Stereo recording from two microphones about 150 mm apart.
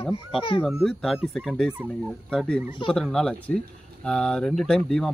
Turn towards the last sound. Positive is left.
turn(degrees=0)  # may be behind; listen again after turning